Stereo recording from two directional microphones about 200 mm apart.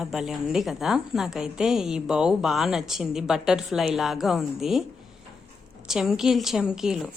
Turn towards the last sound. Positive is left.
turn(degrees=0)  # may be behind; listen again after turning